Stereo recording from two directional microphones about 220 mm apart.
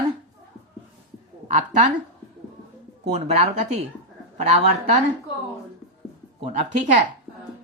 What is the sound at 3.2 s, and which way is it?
Speech, 30° right (ahead or behind).